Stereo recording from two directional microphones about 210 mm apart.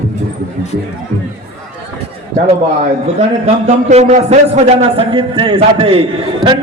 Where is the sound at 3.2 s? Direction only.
30° right (ahead or behind).